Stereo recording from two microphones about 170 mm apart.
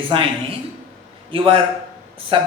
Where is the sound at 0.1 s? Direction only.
30° right (ahead or behind).